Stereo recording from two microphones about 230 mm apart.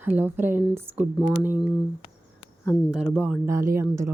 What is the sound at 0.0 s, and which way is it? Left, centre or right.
Speech, centre.